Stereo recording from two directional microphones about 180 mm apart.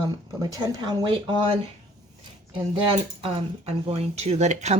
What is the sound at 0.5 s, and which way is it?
Speech, 20° right (ahead or behind).